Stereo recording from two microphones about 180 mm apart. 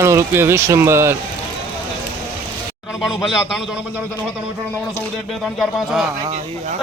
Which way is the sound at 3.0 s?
5° right (ahead or behind).